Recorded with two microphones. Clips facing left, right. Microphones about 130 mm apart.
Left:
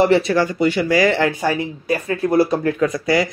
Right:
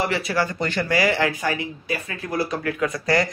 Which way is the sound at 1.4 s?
40° left (ahead or behind).